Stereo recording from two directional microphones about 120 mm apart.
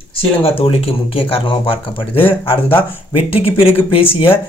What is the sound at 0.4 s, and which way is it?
Speech, 55° left (ahead or behind).